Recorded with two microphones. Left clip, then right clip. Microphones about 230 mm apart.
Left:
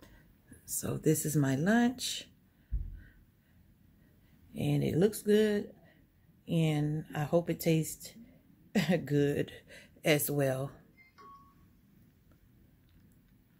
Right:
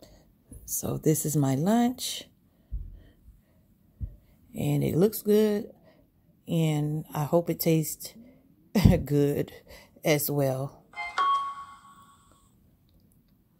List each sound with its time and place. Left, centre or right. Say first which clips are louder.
0.7 s speech: right 4 dB; right
4.5 s speech: right 4 dB; right